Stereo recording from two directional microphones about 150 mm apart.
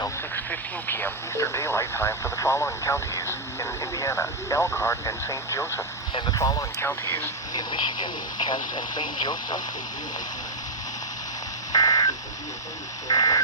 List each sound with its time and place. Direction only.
0.0 s speech: 15° left (ahead or behind)
7.5 s speech: 30° left (ahead or behind)
11.7 s telephone dialing: 25° left (ahead or behind)
13.1 s speech: 25° left (ahead or behind)